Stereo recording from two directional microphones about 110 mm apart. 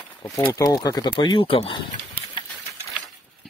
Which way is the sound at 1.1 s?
45° left (ahead or behind).